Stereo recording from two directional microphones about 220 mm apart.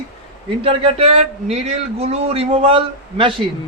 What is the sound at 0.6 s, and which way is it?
A man's voice, 25° right (ahead or behind).